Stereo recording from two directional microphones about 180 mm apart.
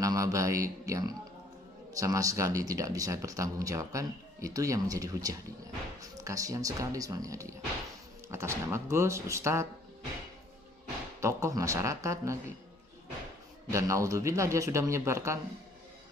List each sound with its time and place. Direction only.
0.0 s a man's voice: 20° right (ahead or behind)
11.1 s a man's voice: 15° right (ahead or behind)
13.7 s a man's voice: 15° right (ahead or behind)